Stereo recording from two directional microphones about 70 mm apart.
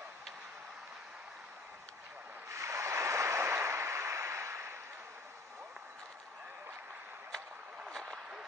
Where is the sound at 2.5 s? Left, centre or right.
Right.